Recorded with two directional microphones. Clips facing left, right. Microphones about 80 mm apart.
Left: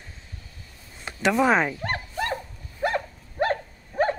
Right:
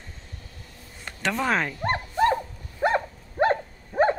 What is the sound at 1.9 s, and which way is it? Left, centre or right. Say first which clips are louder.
Dog: right 6 dB; right.